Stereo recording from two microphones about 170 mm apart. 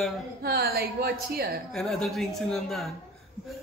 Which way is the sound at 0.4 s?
65° right (ahead or behind).